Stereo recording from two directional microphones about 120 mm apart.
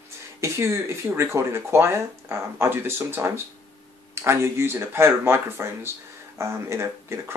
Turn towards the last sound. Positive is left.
turn(degrees=-25)  # may be behind; listen again after turning